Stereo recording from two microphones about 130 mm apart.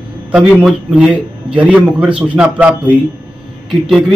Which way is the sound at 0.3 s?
10° right (ahead or behind).